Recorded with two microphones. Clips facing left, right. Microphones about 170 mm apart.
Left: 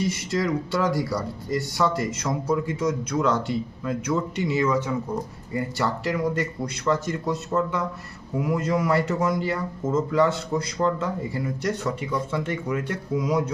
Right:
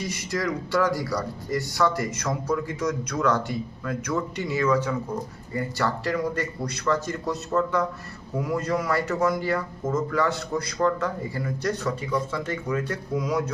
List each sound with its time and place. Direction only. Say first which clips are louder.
0.1 s speech: left 3 dB; 25° left (ahead or behind)